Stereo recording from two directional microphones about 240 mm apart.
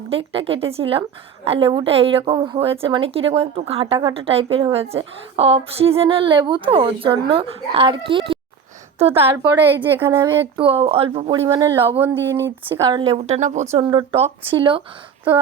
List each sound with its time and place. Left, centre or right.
0.1 s a woman's voice: right
10.6 s a woman's voice: right
11.4 s a woman's voice: centre